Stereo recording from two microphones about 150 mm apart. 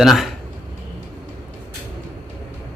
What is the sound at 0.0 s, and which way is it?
Speech, centre (ahead or behind).